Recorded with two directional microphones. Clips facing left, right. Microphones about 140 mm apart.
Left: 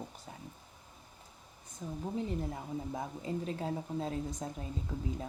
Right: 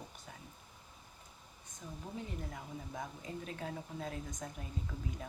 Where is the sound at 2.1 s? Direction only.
25° left (ahead or behind).